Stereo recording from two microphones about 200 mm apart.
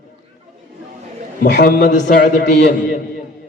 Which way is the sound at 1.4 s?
60° left (ahead or behind).